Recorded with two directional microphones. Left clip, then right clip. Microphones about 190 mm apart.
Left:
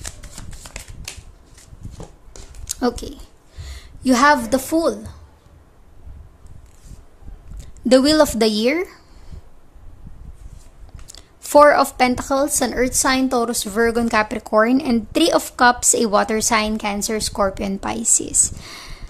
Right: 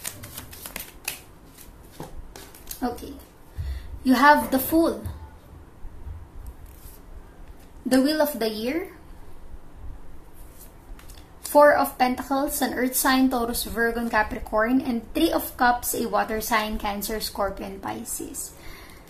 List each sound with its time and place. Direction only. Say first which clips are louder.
0.8 s a sound: left 1 dB; 10° left (ahead or behind)
2.7 s speech: left 8 dB; 50° left (ahead or behind)
4.0 s a woman's voice: left 2 dB; 40° left (ahead or behind)
7.9 s speech: left 8 dB; 50° left (ahead or behind)
11.1 s speech: left 5 dB; 50° left (ahead or behind)